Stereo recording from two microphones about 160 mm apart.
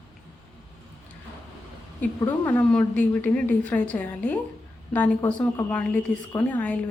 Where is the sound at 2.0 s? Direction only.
10° left (ahead or behind).